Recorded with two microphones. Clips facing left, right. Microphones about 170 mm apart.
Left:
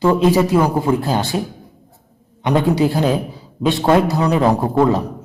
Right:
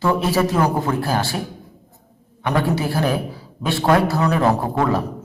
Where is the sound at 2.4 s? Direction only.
15° left (ahead or behind).